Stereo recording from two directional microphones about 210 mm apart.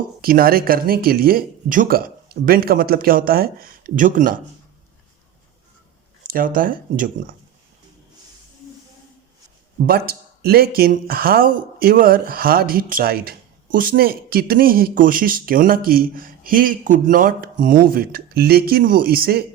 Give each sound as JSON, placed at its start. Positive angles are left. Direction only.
{"t": 0.2, "sound": "speech", "side_deg": -45}
{"t": 6.2, "sound": "speech", "side_deg": -40}
{"t": 9.8, "sound": "speech", "side_deg": -45}